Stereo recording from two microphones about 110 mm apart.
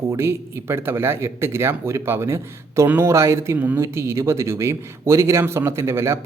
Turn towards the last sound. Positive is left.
turn(degrees=-25)  # may be behind; listen again after turning